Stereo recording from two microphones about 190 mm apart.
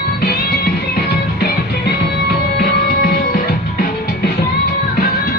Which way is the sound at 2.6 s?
50° left (ahead or behind).